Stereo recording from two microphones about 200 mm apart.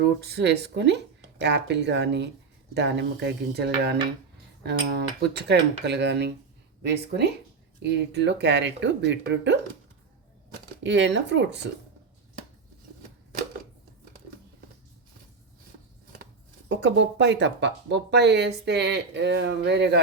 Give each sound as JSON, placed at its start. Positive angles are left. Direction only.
{"t": 0.2, "sound": "speech", "side_deg": -55}
{"t": 10.8, "sound": "speech", "side_deg": -60}
{"t": 16.6, "sound": "speech", "side_deg": -65}